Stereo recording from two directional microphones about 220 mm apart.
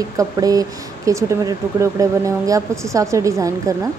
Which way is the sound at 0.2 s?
15° right (ahead or behind).